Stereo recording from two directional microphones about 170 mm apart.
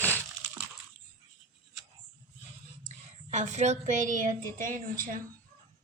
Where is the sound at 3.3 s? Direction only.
45° right (ahead or behind).